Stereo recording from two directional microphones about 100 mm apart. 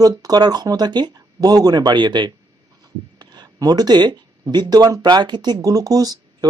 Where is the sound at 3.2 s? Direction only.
45° right (ahead or behind).